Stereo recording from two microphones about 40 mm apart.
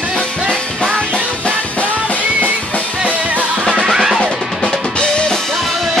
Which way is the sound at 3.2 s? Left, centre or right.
Right.